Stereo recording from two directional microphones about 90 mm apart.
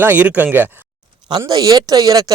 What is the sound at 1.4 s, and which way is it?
Speech, 45° right (ahead or behind).